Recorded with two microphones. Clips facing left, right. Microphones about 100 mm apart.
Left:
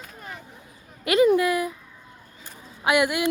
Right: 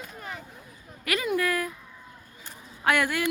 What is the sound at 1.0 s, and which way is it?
Speech, 25° left (ahead or behind).